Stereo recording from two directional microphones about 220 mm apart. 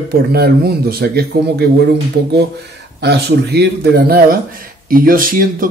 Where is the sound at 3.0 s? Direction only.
50° right (ahead or behind).